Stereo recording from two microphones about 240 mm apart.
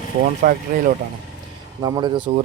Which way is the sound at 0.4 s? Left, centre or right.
Right.